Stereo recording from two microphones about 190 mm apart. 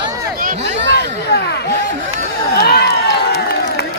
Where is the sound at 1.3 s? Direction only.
60° left (ahead or behind).